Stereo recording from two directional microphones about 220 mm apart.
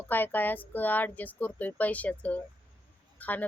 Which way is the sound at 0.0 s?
10° left (ahead or behind).